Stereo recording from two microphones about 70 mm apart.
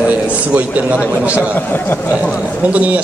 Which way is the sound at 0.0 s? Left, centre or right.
Centre.